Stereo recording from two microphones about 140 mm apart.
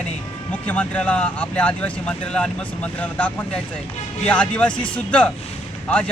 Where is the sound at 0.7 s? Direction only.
10° left (ahead or behind).